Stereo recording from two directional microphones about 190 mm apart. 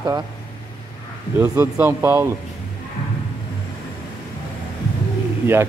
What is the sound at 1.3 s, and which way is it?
Speech, 10° right (ahead or behind).